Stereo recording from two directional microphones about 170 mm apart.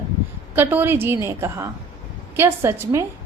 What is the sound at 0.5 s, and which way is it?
A woman's voice, 10° right (ahead or behind).